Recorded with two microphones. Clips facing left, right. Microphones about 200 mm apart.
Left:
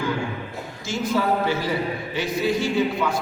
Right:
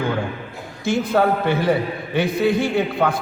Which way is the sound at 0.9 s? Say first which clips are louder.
Right 5 dB; 60° right (ahead or behind).